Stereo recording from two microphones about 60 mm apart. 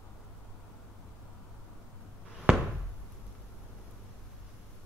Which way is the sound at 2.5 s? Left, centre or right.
Right.